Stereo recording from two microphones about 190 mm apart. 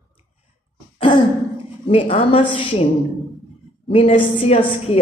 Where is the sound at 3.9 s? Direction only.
30° left (ahead or behind).